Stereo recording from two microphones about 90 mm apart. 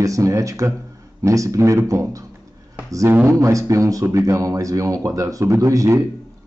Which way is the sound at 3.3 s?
35° right (ahead or behind).